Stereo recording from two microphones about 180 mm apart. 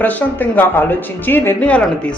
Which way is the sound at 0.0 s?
10° left (ahead or behind).